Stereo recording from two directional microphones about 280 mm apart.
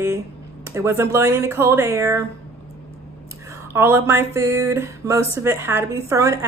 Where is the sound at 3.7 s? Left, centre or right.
Centre.